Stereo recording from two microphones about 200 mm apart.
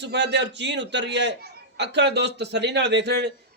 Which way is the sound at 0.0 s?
60° right (ahead or behind).